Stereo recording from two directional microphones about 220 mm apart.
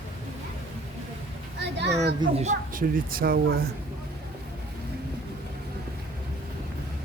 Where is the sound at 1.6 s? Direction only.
50° right (ahead or behind).